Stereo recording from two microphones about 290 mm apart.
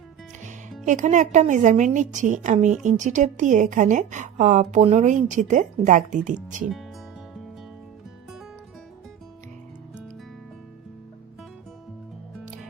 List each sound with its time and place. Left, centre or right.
0.9 s a woman's voice: right